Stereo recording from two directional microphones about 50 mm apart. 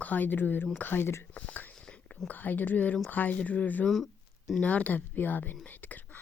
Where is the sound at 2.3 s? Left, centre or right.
Left.